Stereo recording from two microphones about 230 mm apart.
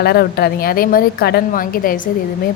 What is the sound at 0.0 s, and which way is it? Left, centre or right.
Speech, left.